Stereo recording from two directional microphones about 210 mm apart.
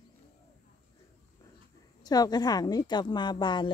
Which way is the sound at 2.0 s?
20° left (ahead or behind).